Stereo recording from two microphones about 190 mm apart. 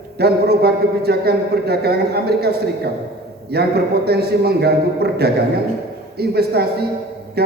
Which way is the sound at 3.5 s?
55° right (ahead or behind).